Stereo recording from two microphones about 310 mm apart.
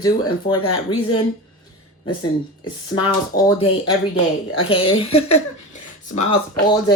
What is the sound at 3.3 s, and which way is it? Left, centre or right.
Speech, centre.